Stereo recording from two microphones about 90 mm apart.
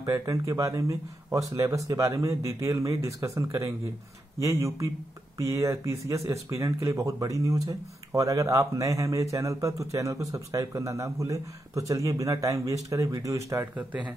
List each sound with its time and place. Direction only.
0.0 s speech: 40° right (ahead or behind)